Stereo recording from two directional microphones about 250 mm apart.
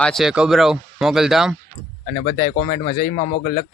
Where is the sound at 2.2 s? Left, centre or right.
Left.